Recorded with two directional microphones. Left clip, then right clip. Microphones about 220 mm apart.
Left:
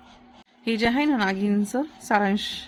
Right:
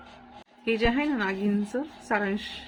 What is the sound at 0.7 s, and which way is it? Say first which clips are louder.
A woman's voice: left 3 dB; 50° left (ahead or behind).